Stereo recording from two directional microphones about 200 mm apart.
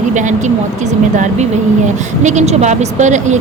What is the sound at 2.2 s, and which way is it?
A woman's voice, 35° right (ahead or behind).